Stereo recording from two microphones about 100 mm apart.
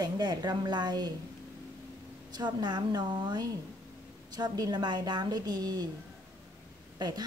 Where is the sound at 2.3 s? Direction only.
45° right (ahead or behind).